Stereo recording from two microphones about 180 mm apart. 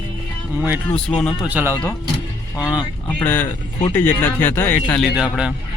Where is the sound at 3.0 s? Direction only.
10° left (ahead or behind).